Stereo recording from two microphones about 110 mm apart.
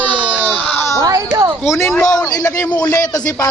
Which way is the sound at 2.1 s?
30° left (ahead or behind).